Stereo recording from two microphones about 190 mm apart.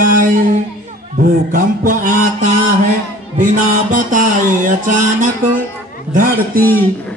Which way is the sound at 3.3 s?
45° right (ahead or behind).